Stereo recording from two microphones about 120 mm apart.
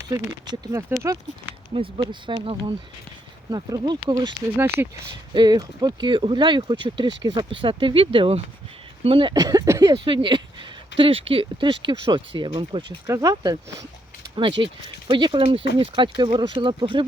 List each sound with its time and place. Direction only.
0.4 s speech: 35° right (ahead or behind)
0.7 s speech: 20° right (ahead or behind)
1.7 s speech: 45° right (ahead or behind)
3.5 s speech: 30° right (ahead or behind)
4.5 s speech: 20° right (ahead or behind)
5.3 s speech: 35° right (ahead or behind)
9.3 s speech: 30° right (ahead or behind)
13.1 s speech: 30° right (ahead or behind)
14.3 s speech: 45° right (ahead or behind)